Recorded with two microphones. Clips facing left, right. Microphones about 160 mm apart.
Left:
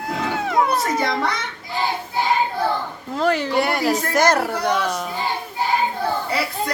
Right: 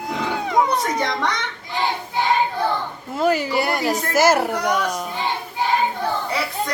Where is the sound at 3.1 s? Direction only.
5° right (ahead or behind).